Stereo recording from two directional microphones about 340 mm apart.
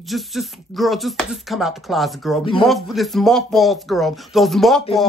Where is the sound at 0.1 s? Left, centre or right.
Centre.